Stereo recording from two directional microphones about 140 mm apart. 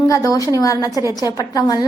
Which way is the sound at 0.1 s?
20° left (ahead or behind).